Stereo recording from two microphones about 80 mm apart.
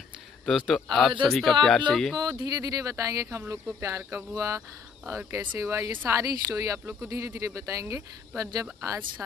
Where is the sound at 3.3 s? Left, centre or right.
Right.